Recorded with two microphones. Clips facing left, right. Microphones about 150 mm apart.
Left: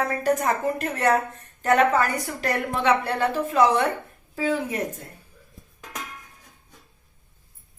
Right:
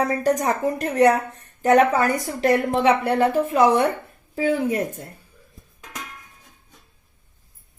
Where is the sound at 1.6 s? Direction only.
15° right (ahead or behind).